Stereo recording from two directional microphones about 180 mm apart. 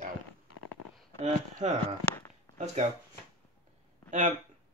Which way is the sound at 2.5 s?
35° right (ahead or behind).